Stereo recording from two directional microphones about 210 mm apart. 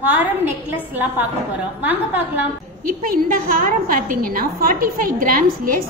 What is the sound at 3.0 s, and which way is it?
A woman's voice, 40° right (ahead or behind).